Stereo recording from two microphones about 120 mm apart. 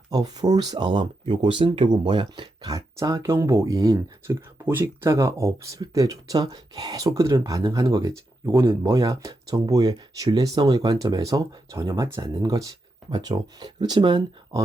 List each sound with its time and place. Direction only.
0.1 s speech: 35° right (ahead or behind)